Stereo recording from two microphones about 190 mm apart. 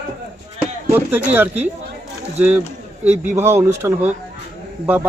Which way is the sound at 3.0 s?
10° right (ahead or behind).